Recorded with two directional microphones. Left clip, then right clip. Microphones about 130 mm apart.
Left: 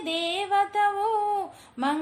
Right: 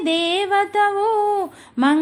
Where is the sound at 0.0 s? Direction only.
40° right (ahead or behind).